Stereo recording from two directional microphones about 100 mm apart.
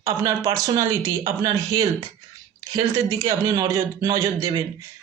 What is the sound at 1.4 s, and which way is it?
Speech, 35° right (ahead or behind).